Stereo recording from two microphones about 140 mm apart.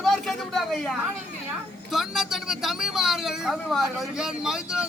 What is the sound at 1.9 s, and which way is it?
Speech, centre (ahead or behind).